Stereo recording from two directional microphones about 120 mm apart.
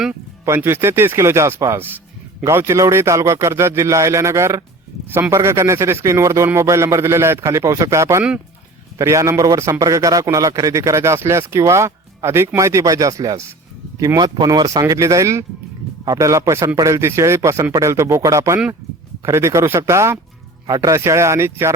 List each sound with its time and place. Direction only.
0.4 s a man's voice: 20° right (ahead or behind)